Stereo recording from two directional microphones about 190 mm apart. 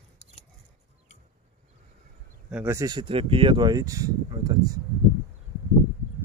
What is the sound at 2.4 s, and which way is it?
Speech, 10° right (ahead or behind).